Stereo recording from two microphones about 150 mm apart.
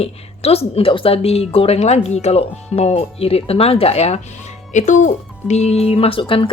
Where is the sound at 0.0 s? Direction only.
40° left (ahead or behind).